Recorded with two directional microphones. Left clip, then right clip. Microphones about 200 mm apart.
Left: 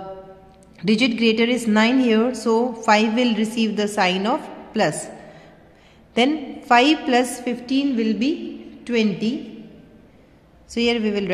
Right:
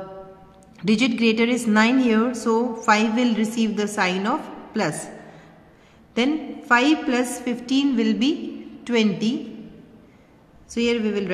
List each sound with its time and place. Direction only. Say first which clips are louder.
0.7 s a woman's voice: left 2 dB; 5° left (ahead or behind)
6.1 s a woman's voice: left 3 dB; 15° left (ahead or behind)
7.2 s a woman's voice: left 1 dB; centre (ahead or behind)
10.7 s a woman's voice: left 2 dB; 15° left (ahead or behind)